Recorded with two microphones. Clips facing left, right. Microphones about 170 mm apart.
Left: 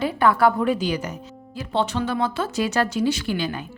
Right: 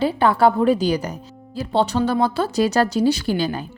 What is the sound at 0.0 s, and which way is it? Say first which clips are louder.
A woman's voice: right 2 dB; 30° right (ahead or behind).